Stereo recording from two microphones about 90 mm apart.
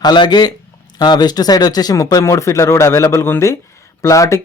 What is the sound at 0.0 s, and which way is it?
A man's voice, 55° left (ahead or behind).